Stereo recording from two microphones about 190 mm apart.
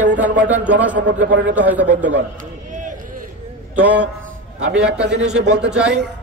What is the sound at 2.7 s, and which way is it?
Run, 45° right (ahead or behind).